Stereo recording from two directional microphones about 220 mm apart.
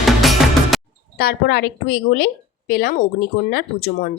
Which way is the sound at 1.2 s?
45° left (ahead or behind).